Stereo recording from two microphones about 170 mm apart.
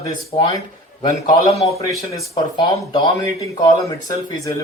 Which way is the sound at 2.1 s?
35° left (ahead or behind).